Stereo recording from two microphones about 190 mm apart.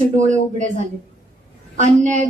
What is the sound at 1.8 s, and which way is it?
Speech, 40° right (ahead or behind).